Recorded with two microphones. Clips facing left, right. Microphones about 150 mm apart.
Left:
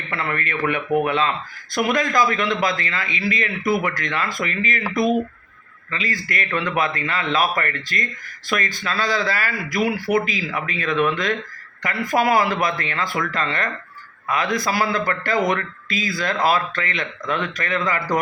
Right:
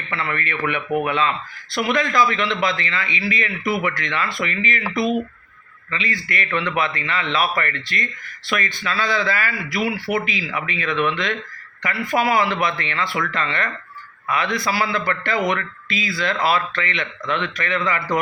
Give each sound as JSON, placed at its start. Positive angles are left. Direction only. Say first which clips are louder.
{"t": 0.1, "sound": "speech", "louder": "even", "side_deg": 45}